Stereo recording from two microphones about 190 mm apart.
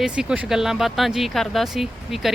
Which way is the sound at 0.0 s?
5° right (ahead or behind).